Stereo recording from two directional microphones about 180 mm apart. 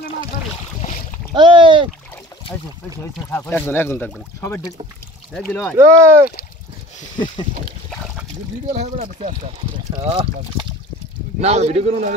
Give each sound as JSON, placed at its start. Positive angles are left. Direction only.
{"t": 1.3, "sound": "a sound", "side_deg": -25}
{"t": 3.3, "sound": "speech", "side_deg": 10}
{"t": 5.8, "sound": "speech", "side_deg": -15}
{"t": 8.8, "sound": "speech", "side_deg": -35}
{"t": 9.9, "sound": "speech", "side_deg": -25}
{"t": 11.4, "sound": "speech", "side_deg": -35}